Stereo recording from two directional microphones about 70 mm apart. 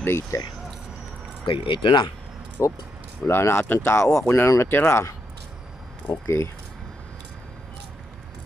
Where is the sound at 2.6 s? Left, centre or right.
Left.